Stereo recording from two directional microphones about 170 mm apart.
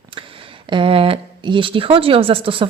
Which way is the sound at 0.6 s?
30° right (ahead or behind).